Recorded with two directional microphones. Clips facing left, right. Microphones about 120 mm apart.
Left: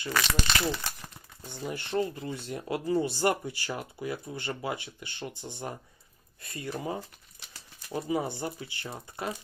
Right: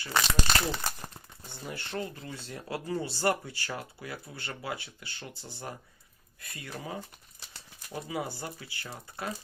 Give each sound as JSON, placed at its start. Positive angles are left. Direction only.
{"t": 0.4, "sound": "speech", "side_deg": -40}
{"t": 1.5, "sound": "speech", "side_deg": 15}
{"t": 8.0, "sound": "speech", "side_deg": 25}